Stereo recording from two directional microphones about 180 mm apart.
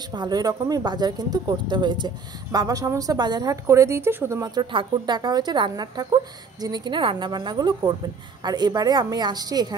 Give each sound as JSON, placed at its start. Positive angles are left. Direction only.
{"t": 0.1, "sound": "speech", "side_deg": -25}